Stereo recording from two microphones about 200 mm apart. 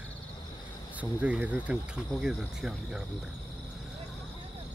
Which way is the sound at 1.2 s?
5° right (ahead or behind).